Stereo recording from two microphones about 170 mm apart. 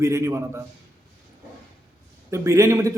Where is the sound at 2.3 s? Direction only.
15° right (ahead or behind).